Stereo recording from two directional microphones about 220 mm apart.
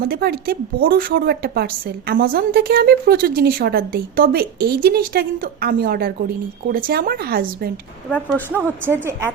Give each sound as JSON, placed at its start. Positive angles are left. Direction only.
{"t": 0.1, "sound": "a woman's voice", "side_deg": -45}
{"t": 8.1, "sound": "a woman's voice", "side_deg": 10}
{"t": 8.6, "sound": "a woman's voice", "side_deg": -10}